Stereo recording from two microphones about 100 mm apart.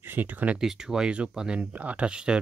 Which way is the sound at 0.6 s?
5° right (ahead or behind).